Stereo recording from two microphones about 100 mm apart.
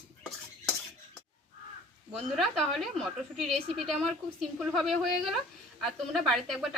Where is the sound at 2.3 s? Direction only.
Centre (ahead or behind).